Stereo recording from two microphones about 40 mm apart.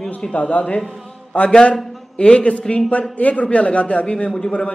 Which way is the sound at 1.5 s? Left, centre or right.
Left.